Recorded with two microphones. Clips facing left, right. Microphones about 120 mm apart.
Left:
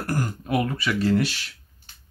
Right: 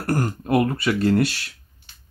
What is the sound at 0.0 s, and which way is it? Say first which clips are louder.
Throat clearing: right 4 dB; 55° right (ahead or behind).